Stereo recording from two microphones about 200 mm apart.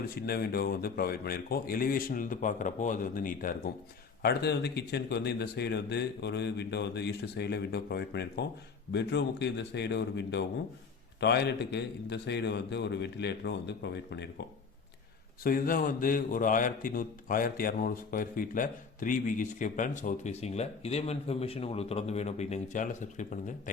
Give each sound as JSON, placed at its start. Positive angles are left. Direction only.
{"t": 0.2, "sound": "speech", "side_deg": 50}
{"t": 15.4, "sound": "a man's voice", "side_deg": 45}